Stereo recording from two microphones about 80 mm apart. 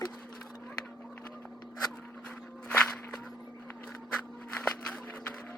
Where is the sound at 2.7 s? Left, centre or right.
Centre.